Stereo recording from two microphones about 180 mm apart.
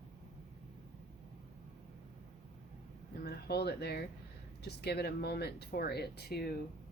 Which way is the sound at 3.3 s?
60° left (ahead or behind).